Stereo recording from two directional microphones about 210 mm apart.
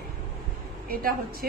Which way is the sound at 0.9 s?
45° right (ahead or behind).